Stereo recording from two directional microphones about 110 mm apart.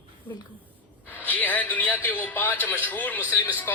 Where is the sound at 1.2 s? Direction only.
15° left (ahead or behind).